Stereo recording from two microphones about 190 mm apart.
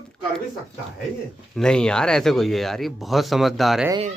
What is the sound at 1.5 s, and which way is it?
Speech, 5° left (ahead or behind).